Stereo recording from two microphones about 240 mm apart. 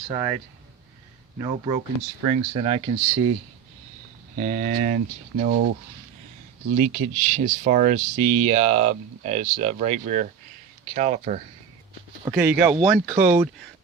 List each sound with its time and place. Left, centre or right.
0.1 s speech: centre
1.4 s speech: right
4.4 s speech: right
6.7 s speech: right
12.2 s speech: centre